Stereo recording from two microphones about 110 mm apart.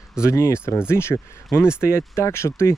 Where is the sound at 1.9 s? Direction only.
25° left (ahead or behind).